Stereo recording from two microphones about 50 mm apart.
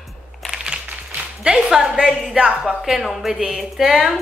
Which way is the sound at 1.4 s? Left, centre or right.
Centre.